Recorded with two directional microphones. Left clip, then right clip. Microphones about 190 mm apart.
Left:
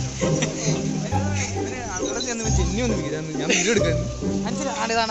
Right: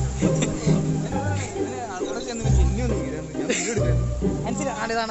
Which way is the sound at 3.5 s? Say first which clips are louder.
Left 5 dB; 10° right (ahead or behind).